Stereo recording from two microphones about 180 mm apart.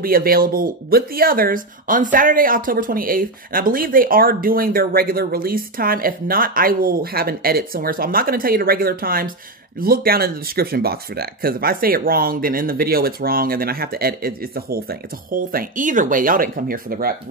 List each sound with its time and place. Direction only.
0.0 s speech: 55° right (ahead or behind)